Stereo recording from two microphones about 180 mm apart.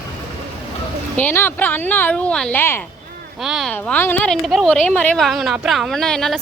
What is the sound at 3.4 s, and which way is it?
A woman's voice, centre (ahead or behind).